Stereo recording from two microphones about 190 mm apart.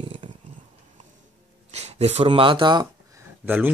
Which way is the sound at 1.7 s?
35° right (ahead or behind).